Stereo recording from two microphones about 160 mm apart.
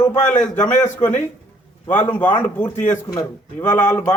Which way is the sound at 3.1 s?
20° left (ahead or behind).